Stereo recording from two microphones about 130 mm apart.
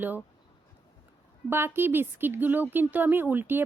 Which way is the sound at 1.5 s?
15° right (ahead or behind).